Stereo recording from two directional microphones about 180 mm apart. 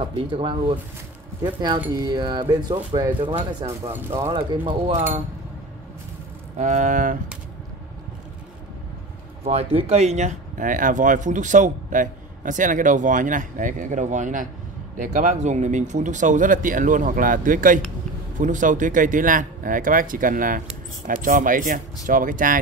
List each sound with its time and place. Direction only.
0.0 s speech: 30° right (ahead or behind)
3.9 s speech: 15° right (ahead or behind)
4.3 s speech: 30° right (ahead or behind)
6.6 s speech: 45° right (ahead or behind)
9.4 s speech: 35° right (ahead or behind)